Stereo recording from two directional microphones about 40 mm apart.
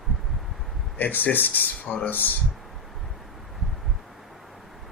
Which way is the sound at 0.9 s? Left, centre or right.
Left.